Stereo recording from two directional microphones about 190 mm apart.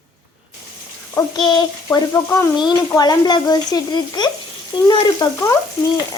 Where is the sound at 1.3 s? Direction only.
25° left (ahead or behind).